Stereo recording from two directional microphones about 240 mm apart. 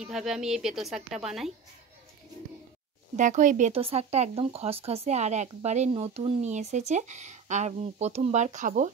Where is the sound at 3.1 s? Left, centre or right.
Right.